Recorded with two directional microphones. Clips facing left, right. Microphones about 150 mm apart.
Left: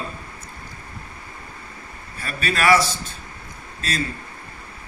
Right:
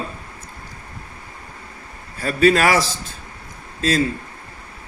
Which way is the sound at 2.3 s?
90° right.